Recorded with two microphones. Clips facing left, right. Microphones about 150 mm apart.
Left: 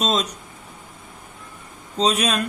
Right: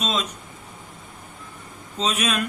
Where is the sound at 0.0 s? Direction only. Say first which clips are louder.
Left 4 dB; 40° left (ahead or behind).